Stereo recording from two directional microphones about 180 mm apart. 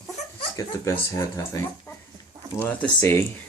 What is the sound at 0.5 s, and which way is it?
Speech, 15° left (ahead or behind).